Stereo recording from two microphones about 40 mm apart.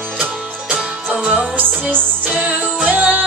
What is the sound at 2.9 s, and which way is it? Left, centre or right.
Music, right.